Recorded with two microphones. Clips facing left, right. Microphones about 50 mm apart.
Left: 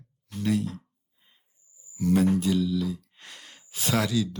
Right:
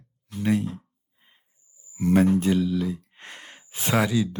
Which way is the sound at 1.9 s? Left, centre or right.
Right.